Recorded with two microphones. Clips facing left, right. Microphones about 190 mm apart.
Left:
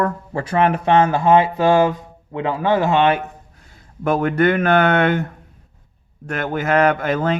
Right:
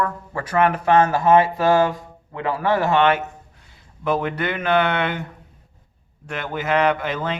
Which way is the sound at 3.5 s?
45° left (ahead or behind).